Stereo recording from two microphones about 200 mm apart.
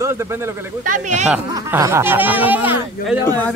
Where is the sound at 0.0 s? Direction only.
15° right (ahead or behind).